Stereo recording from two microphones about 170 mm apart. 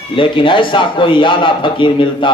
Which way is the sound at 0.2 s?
30° left (ahead or behind).